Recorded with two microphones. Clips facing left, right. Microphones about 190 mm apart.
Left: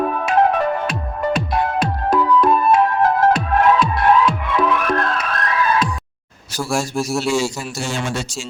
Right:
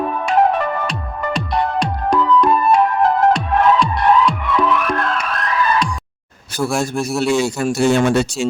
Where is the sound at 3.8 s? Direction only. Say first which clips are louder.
Even; 5° left (ahead or behind).